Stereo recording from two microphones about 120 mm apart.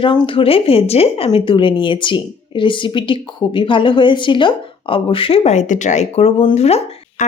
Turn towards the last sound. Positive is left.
turn(degrees=60)  # may be behind; listen again after turning